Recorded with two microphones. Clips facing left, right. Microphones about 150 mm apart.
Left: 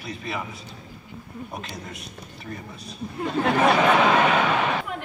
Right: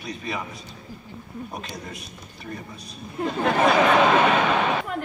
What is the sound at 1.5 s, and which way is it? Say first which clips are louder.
Speech: right 1 dB; centre (ahead or behind).